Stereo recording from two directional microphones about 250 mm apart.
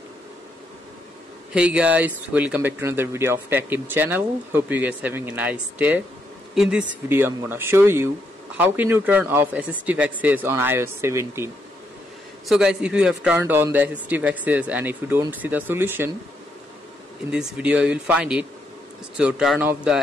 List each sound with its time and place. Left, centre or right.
1.5 s speech: centre
17.3 s speech: centre